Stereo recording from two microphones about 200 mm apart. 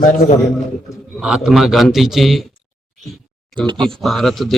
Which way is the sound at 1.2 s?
5° right (ahead or behind).